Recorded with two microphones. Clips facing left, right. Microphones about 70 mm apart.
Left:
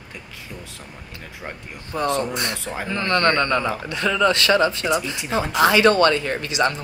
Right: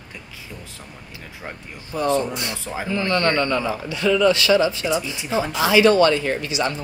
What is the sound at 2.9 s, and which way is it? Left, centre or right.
Speech, left.